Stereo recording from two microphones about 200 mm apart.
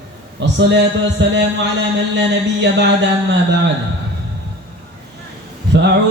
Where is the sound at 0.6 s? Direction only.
60° right (ahead or behind).